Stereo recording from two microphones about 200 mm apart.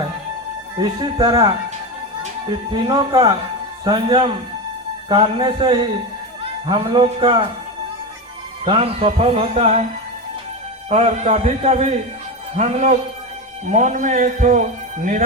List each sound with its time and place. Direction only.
0.8 s a man's voice: 20° right (ahead or behind)
8.6 s a man's voice: 30° right (ahead or behind)
10.8 s a man's voice: 35° right (ahead or behind)